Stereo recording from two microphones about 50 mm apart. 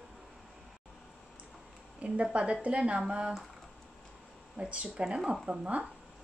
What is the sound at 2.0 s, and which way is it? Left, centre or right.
A woman's voice, right.